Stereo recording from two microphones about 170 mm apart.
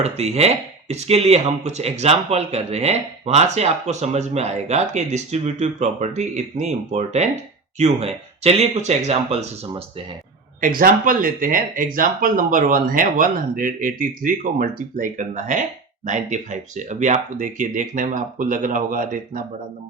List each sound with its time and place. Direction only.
0.0 s speech: 40° right (ahead or behind)
10.6 s speech: 55° right (ahead or behind)